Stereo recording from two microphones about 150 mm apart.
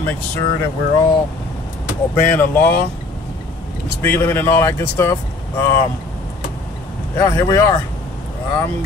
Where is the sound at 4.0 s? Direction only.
15° left (ahead or behind).